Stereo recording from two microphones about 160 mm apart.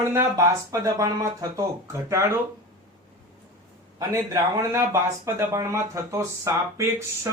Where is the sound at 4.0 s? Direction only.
20° right (ahead or behind).